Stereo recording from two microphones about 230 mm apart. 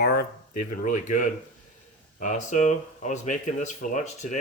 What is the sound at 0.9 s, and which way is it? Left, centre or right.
Speech, left.